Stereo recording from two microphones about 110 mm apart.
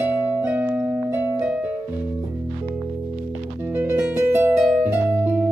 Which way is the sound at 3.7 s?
15° right (ahead or behind).